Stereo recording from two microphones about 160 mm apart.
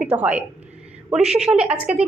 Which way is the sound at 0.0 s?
10° right (ahead or behind).